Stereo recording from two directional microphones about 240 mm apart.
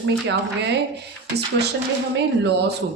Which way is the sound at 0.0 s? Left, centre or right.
Right.